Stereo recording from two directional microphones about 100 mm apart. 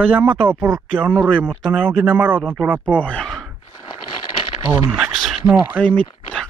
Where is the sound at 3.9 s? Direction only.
60° left (ahead or behind).